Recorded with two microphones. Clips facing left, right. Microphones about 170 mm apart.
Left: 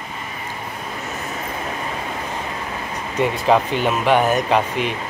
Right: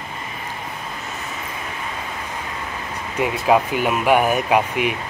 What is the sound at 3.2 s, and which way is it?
Speech, 10° right (ahead or behind).